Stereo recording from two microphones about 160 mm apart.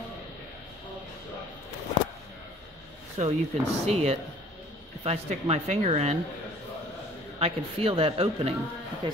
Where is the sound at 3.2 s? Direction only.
50° right (ahead or behind).